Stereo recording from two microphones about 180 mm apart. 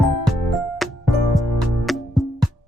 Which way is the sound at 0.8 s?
Centre (ahead or behind).